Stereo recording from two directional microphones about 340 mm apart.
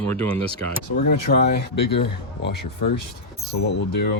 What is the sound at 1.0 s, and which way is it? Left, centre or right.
Speech, left.